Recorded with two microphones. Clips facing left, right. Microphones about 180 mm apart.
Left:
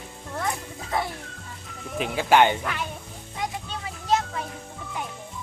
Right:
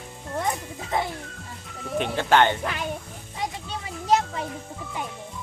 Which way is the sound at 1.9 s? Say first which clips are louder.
Left 1 dB; 5° left (ahead or behind).